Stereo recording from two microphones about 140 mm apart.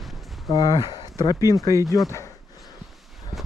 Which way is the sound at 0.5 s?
30° left (ahead or behind).